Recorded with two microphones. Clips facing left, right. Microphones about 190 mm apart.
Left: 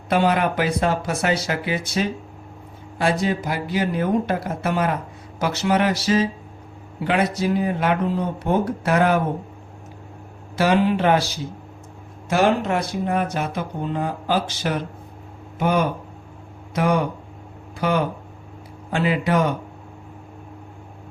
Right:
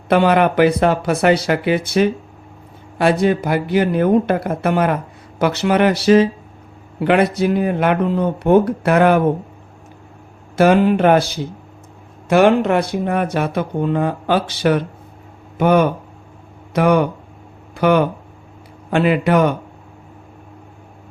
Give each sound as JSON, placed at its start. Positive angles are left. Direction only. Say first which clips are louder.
{"t": 0.1, "sound": "speech", "louder": "right 6 dB", "side_deg": -65}
{"t": 10.6, "sound": "speech", "louder": "right 6 dB", "side_deg": -50}
{"t": 12.3, "sound": "speech", "louder": "right 6 dB", "side_deg": -65}